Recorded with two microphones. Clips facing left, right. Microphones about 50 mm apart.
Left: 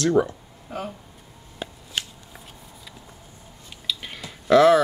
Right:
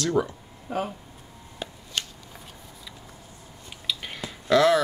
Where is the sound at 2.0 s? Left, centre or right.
Centre.